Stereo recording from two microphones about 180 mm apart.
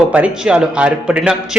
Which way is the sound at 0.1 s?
5° right (ahead or behind).